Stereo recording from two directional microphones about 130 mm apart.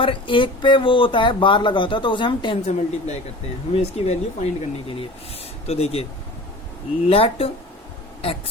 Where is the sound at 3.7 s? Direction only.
50° left (ahead or behind).